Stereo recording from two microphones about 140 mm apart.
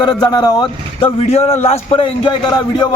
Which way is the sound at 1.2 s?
50° left (ahead or behind).